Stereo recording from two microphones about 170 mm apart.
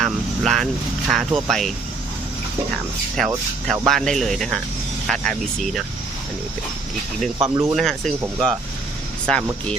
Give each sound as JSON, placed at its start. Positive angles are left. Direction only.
{"t": 0.0, "sound": "speech", "side_deg": 0}
{"t": 3.2, "sound": "speech", "side_deg": 0}
{"t": 7.3, "sound": "speech", "side_deg": -20}
{"t": 7.7, "sound": "speech", "side_deg": 0}